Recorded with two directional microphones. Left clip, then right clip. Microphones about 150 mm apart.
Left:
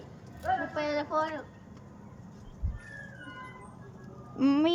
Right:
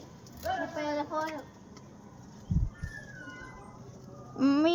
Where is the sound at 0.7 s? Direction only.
5° right (ahead or behind).